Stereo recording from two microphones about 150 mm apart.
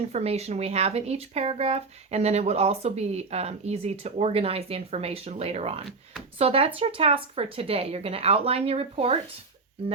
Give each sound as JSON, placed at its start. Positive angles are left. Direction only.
{"t": 0.1, "sound": "speech", "side_deg": -45}